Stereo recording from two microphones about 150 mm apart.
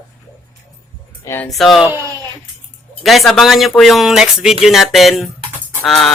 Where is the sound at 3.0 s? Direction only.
Centre (ahead or behind).